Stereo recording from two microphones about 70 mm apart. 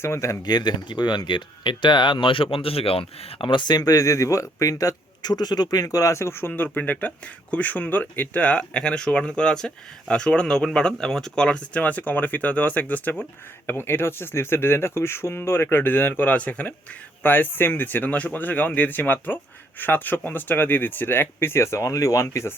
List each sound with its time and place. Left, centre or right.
0.0 s speech: left
0.4 s speech: left
3.6 s a man's voice: left
6.5 s speech: left